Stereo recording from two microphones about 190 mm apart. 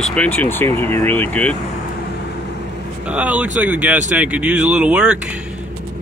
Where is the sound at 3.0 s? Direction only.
5° right (ahead or behind).